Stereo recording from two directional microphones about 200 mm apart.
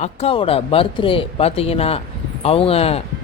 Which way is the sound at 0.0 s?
30° left (ahead or behind).